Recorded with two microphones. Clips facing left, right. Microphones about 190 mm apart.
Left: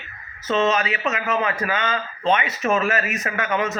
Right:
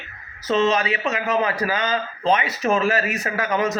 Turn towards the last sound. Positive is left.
turn(degrees=-35)  # may be behind; listen again after turning